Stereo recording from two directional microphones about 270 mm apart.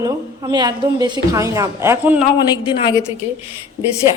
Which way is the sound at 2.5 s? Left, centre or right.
Centre.